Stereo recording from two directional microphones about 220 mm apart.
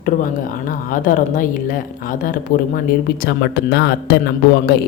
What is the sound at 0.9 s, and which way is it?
A woman's voice, 35° left (ahead or behind).